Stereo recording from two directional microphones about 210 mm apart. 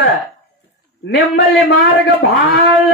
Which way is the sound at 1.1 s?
55° left (ahead or behind).